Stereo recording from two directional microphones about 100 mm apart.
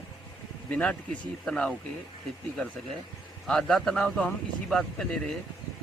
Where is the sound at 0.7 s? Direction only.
15° left (ahead or behind).